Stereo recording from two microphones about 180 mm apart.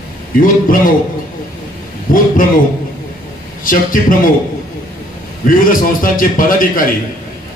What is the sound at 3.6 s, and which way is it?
Speech, 50° left (ahead or behind).